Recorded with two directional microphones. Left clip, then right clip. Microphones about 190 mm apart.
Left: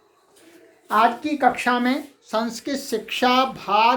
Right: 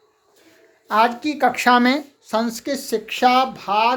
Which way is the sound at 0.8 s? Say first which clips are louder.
Right 1 dB; 60° right (ahead or behind).